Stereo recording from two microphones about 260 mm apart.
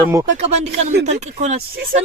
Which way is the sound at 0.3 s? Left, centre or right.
Right.